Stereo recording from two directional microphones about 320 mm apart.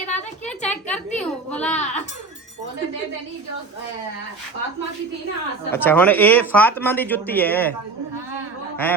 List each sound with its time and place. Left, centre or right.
0.4 s a sound: centre
1.7 s a child's voice: left
5.7 s speech: centre
8.8 s speech: centre